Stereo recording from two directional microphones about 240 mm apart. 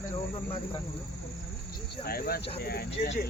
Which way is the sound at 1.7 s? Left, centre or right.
Left.